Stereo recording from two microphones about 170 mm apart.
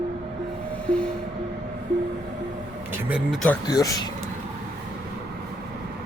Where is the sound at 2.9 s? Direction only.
10° right (ahead or behind).